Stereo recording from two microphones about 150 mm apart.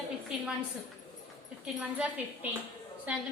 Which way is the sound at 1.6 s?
10° right (ahead or behind).